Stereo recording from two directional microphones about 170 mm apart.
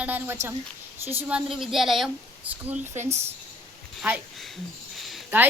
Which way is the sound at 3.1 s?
40° right (ahead or behind).